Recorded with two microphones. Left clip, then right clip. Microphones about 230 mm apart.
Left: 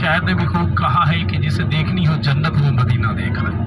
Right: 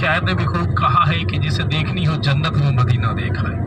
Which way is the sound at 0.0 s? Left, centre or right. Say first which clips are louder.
Left 1 dB; right.